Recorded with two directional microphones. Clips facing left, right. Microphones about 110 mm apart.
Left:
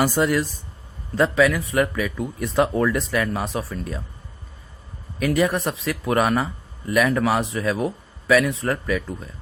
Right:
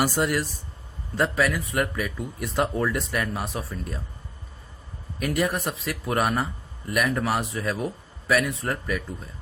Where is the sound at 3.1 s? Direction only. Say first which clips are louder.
Left 5 dB; 90° left.